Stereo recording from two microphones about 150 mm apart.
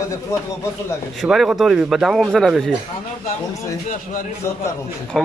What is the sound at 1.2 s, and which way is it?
Speech, centre (ahead or behind).